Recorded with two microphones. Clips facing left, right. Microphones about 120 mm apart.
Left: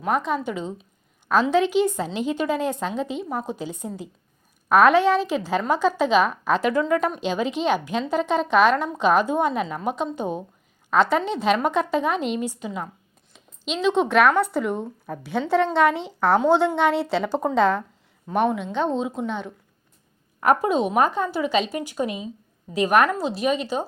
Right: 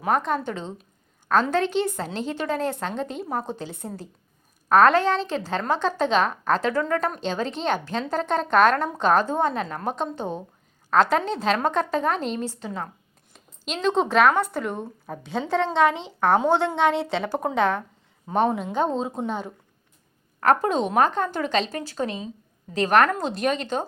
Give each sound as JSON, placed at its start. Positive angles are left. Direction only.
{"t": 0.0, "sound": "a woman's voice", "side_deg": 5}
{"t": 13.3, "sound": "speech", "side_deg": 0}
{"t": 14.4, "sound": "a woman's voice", "side_deg": 15}
{"t": 15.2, "sound": "a woman's voice", "side_deg": 5}
{"t": 16.0, "sound": "a woman's voice", "side_deg": -20}
{"t": 16.5, "sound": "a woman's voice", "side_deg": 15}
{"t": 18.3, "sound": "a woman's voice", "side_deg": -30}
{"t": 18.6, "sound": "a woman's voice", "side_deg": -5}
{"t": 19.3, "sound": "a woman's voice", "side_deg": -40}
{"t": 20.4, "sound": "a woman's voice", "side_deg": 10}